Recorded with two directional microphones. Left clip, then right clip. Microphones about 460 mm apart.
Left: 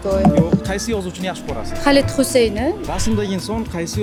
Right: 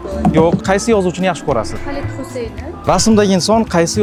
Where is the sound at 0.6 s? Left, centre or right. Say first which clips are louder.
Right 9 dB; right.